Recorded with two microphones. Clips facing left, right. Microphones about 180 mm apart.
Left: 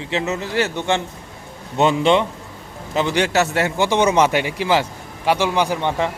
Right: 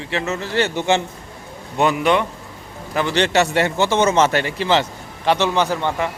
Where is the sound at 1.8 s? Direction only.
25° left (ahead or behind).